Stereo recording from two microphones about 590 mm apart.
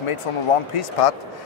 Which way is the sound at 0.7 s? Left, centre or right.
Left.